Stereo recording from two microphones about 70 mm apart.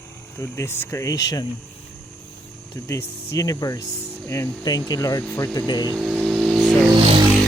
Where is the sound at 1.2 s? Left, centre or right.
Left.